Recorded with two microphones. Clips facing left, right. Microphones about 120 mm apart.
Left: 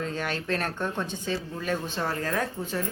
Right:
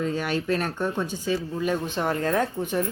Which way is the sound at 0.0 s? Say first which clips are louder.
Right 5 dB; 10° right (ahead or behind).